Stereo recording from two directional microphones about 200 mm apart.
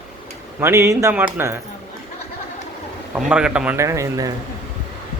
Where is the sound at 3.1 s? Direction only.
5° right (ahead or behind).